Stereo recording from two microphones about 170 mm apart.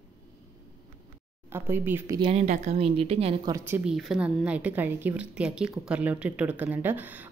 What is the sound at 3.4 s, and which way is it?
A woman's voice, 15° right (ahead or behind).